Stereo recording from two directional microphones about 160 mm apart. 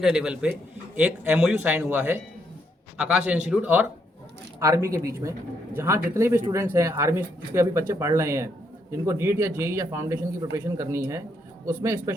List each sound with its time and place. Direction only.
0.0 s a man's voice: 5° right (ahead or behind)